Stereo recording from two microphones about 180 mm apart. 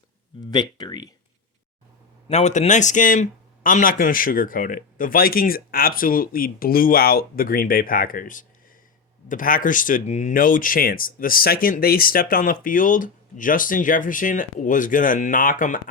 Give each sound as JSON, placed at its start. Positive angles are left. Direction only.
{"t": 0.5, "sound": "speech", "side_deg": 25}
{"t": 2.2, "sound": "speech", "side_deg": 40}